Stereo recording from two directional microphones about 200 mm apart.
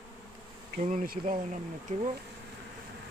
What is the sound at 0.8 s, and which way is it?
Speech, 40° right (ahead or behind).